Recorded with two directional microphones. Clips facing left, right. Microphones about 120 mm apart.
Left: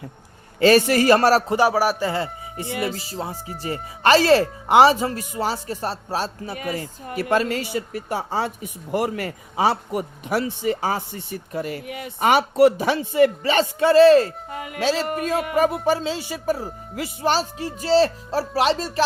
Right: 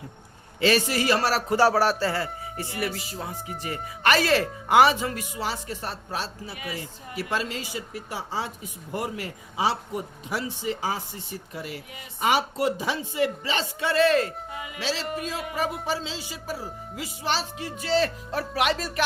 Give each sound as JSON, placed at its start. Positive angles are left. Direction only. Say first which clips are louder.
{"t": 0.6, "sound": "speech", "louder": "left 7 dB", "side_deg": 50}
{"t": 1.5, "sound": "a man's voice", "louder": "left 2 dB", "side_deg": 15}
{"t": 2.9, "sound": "speech", "louder": "left 4 dB", "side_deg": 35}
{"t": 11.9, "sound": "speech", "louder": "left 5 dB", "side_deg": 60}
{"t": 13.9, "sound": "speech", "louder": "left 9 dB", "side_deg": 35}
{"t": 14.5, "sound": "speech", "louder": "left 11 dB", "side_deg": 50}
{"t": 17.2, "sound": "speech", "louder": "left 6 dB", "side_deg": 40}